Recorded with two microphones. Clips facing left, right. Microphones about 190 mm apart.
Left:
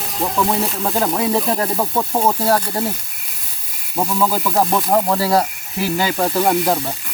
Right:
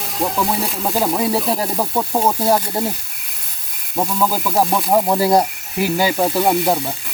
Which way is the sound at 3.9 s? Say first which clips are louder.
Even; 5° right (ahead or behind).